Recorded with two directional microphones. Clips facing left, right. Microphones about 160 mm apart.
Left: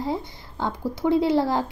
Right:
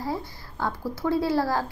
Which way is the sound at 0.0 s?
20° left (ahead or behind).